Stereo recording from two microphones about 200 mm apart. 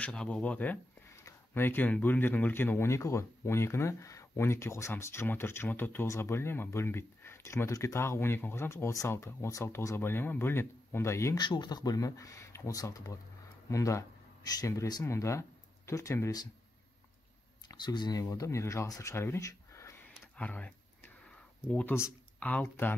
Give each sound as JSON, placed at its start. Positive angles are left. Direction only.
{"t": 0.0, "sound": "speech", "side_deg": 5}
{"t": 17.6, "sound": "speech", "side_deg": 20}